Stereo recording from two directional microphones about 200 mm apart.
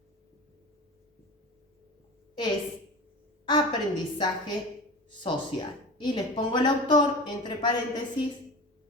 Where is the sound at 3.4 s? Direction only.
20° left (ahead or behind).